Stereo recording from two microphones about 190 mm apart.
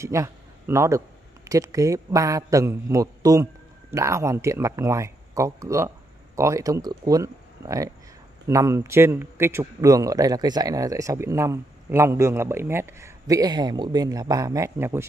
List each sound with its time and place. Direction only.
0.0 s a man's voice: 15° right (ahead or behind)